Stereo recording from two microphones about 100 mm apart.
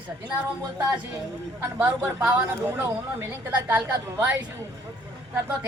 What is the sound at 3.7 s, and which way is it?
Speech, 10° right (ahead or behind).